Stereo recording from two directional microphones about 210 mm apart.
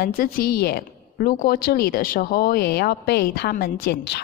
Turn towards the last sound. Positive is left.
turn(degrees=45)  # may be behind; listen again after turning